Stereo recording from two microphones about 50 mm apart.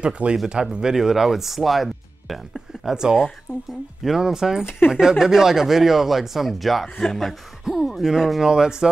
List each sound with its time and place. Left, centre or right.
0.0 s speech: centre
4.6 s speech: left
5.0 s speech: centre
7.6 s speech: centre